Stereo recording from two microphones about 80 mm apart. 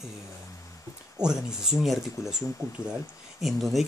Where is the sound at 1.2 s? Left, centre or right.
Centre.